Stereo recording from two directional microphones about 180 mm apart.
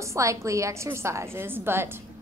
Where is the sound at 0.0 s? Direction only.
15° right (ahead or behind).